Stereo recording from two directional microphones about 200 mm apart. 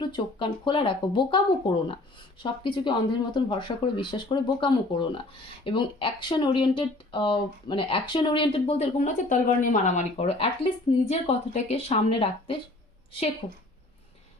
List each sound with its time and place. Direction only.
0.0 s a woman's voice: 20° left (ahead or behind)